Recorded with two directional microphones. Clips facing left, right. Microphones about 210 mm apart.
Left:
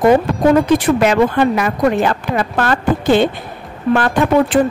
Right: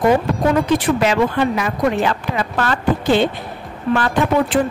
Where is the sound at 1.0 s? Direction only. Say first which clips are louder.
Left 4 dB; 55° left (ahead or behind).